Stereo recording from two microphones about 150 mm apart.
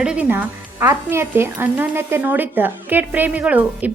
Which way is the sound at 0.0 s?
10° right (ahead or behind).